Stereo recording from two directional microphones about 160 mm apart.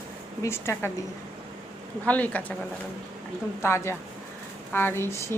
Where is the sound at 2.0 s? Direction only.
10° left (ahead or behind).